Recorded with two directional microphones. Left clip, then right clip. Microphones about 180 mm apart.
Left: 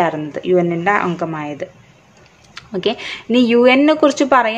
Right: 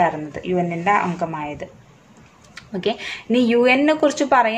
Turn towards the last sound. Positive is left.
turn(degrees=20)  # may be behind; listen again after turning